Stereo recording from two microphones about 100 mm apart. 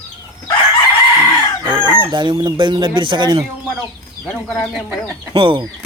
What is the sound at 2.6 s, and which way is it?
Speech, 50° right (ahead or behind).